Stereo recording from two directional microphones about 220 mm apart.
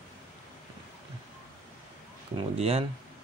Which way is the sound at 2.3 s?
25° right (ahead or behind).